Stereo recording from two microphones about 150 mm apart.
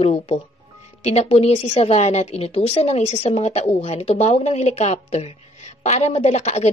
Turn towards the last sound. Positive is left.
turn(degrees=50)  # may be behind; listen again after turning